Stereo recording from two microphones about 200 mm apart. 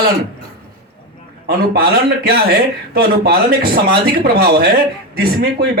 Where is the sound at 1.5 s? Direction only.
50° right (ahead or behind).